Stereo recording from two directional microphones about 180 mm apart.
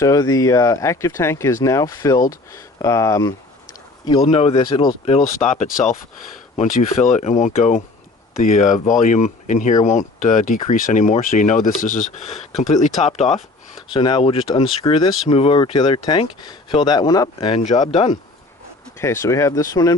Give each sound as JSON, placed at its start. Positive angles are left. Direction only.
{"t": 0.0, "sound": "speech", "side_deg": 20}
{"t": 7.1, "sound": "speech", "side_deg": 40}
{"t": 13.9, "sound": "speech", "side_deg": 25}
{"t": 17.6, "sound": "speech", "side_deg": 35}
{"t": 18.9, "sound": "speech", "side_deg": 15}